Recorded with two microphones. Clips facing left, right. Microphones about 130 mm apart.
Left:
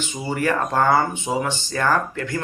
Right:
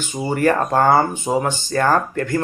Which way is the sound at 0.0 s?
45° right (ahead or behind).